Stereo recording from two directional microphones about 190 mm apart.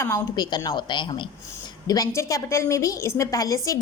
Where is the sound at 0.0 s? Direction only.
20° left (ahead or behind).